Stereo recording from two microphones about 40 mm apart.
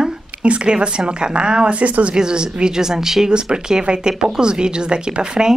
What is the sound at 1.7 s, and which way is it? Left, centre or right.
Speech, right.